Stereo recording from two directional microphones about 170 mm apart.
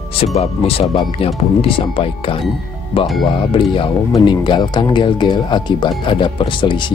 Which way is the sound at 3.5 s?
30° left (ahead or behind).